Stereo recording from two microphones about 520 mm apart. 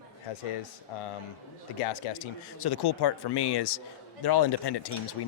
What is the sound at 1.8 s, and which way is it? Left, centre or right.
Speech, left.